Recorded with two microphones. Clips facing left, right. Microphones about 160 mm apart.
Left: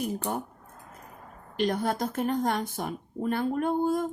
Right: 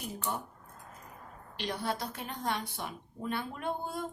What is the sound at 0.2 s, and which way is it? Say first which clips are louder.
Speech: left 5 dB; 50° left (ahead or behind).